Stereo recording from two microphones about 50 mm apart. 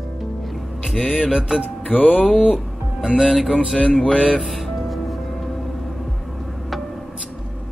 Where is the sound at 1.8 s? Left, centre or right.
Left.